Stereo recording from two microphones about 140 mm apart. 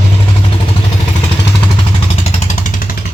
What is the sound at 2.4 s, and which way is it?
Vehicle, 70° left (ahead or behind).